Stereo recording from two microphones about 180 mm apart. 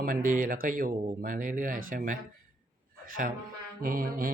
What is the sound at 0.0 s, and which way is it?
Speech, 50° right (ahead or behind).